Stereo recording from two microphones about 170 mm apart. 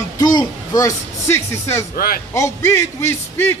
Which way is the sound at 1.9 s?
60° left (ahead or behind).